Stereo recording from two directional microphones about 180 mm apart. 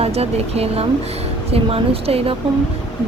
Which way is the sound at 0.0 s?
35° right (ahead or behind).